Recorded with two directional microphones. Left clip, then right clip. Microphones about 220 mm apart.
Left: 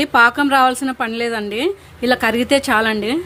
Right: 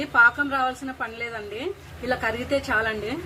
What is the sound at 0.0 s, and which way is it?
A woman's voice, 50° left (ahead or behind).